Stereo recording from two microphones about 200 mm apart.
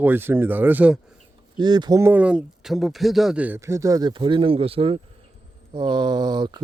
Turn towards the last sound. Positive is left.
turn(degrees=-20)  # may be behind; listen again after turning